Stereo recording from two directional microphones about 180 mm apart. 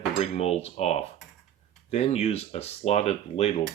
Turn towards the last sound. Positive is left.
turn(degrees=35)  # may be behind; listen again after turning